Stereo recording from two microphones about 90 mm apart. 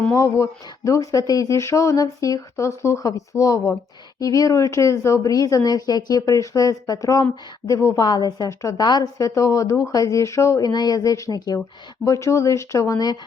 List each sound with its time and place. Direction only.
0.1 s speech: 35° left (ahead or behind)
7.9 s a woman's voice: 50° left (ahead or behind)
10.7 s a woman's voice: 50° left (ahead or behind)
12.0 s speech: 35° left (ahead or behind)